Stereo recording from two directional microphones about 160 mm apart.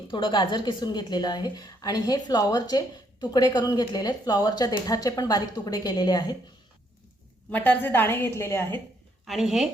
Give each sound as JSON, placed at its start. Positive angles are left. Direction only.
{"t": 0.1, "sound": "a woman's voice", "side_deg": 30}
{"t": 7.5, "sound": "a woman's voice", "side_deg": 10}
{"t": 9.2, "sound": "a woman's voice", "side_deg": 0}